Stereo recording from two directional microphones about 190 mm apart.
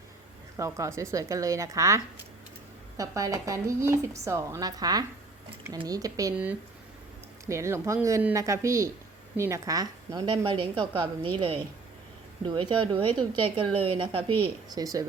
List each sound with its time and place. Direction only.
0.5 s a woman's voice: 15° right (ahead or behind)
3.0 s a woman's voice: 15° right (ahead or behind)
7.4 s a woman's voice: 15° right (ahead or behind)